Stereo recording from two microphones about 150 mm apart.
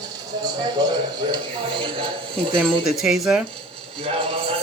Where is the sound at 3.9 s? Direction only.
40° right (ahead or behind).